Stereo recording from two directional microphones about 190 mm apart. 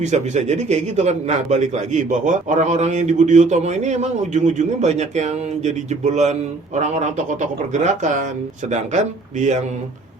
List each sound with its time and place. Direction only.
0.0 s a man's voice: 35° right (ahead or behind)
9.4 s a man's voice: 40° right (ahead or behind)